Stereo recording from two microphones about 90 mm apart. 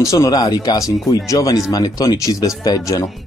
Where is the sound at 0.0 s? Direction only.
35° left (ahead or behind).